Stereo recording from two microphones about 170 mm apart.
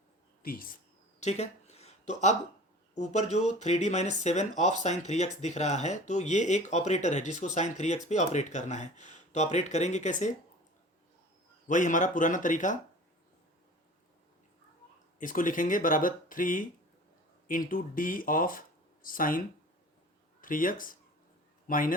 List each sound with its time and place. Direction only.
0.4 s speech: 60° left (ahead or behind)
1.2 s a sound: 40° left (ahead or behind)
2.9 s speech: 45° left (ahead or behind)
11.7 s speech: 50° left (ahead or behind)
15.2 s speech: 50° left (ahead or behind)
20.4 s speech: 55° left (ahead or behind)